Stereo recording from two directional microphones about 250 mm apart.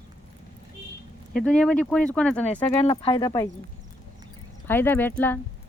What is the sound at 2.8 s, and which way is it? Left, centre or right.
Speech, left.